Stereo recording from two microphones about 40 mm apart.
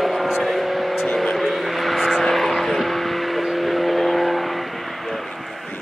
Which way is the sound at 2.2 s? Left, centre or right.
Centre.